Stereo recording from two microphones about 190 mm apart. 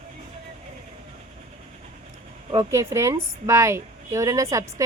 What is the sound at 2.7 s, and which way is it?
A woman's voice, 15° right (ahead or behind).